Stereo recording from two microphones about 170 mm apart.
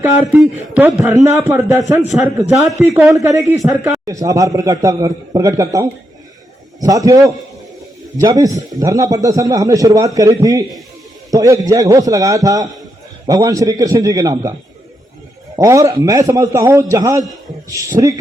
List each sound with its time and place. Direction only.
0.1 s a man's voice: 15° right (ahead or behind)
2.8 s a man's voice: 15° right (ahead or behind)
4.0 s a man's voice: 20° right (ahead or behind)
15.5 s a man's voice: 20° right (ahead or behind)